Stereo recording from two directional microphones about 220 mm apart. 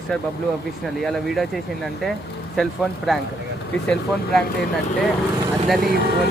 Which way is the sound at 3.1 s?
Centre (ahead or behind).